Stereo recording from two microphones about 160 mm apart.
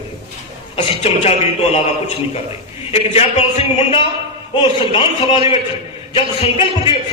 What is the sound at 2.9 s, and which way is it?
A man's voice, 40° left (ahead or behind).